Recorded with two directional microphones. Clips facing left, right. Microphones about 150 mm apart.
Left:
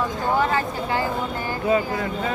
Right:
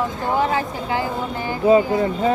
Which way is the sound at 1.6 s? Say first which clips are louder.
Right 7 dB; 25° right (ahead or behind).